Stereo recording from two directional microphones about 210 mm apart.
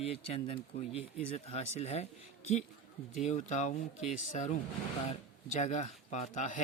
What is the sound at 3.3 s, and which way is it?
Speech, 35° left (ahead or behind).